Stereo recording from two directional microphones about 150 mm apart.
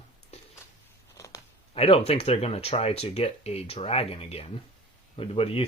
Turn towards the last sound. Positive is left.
turn(degrees=40)  # may be behind; listen again after turning